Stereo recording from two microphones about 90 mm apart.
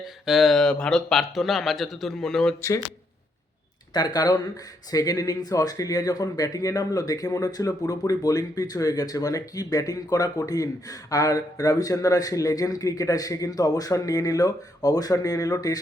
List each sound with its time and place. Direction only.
0.3 s speech: centre (ahead or behind)
3.9 s a man's voice: 50° left (ahead or behind)